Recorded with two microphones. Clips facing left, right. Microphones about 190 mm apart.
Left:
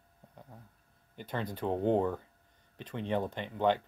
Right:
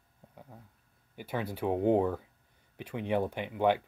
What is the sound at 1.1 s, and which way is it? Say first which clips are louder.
Speech: right 2 dB; 10° right (ahead or behind).